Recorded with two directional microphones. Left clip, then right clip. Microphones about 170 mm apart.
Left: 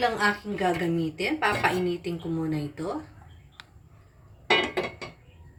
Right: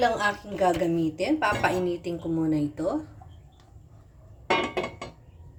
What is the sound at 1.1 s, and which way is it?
Speech, 90° right.